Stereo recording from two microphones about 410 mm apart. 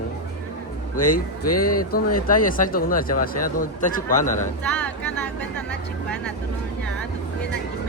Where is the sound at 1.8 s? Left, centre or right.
Left.